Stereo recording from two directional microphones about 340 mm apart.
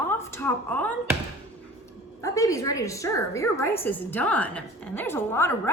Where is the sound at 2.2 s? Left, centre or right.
Centre.